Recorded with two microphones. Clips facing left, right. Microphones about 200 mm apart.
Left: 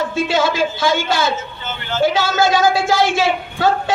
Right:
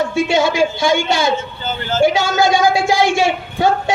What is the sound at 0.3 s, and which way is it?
A man's voice, 15° right (ahead or behind).